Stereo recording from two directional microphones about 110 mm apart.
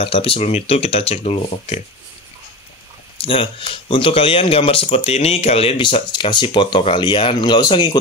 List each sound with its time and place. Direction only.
0.0 s speech: 60° left (ahead or behind)
3.2 s speech: 55° left (ahead or behind)